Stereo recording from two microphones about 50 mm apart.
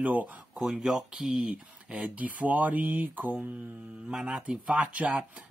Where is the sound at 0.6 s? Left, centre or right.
Centre.